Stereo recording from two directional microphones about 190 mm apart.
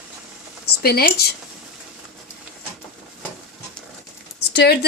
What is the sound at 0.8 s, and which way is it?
Speech, 55° left (ahead or behind).